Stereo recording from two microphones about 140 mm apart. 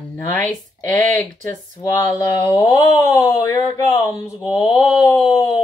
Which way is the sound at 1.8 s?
25° left (ahead or behind).